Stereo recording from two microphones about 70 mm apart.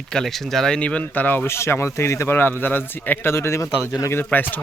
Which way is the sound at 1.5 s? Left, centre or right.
Left.